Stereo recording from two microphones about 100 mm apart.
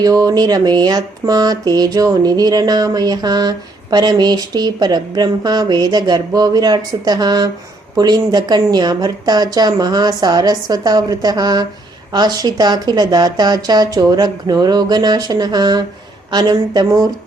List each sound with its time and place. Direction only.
0.0 s speech: 40° right (ahead or behind)